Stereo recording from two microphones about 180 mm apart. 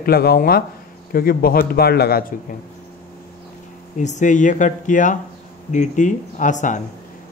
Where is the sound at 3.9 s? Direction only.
40° left (ahead or behind).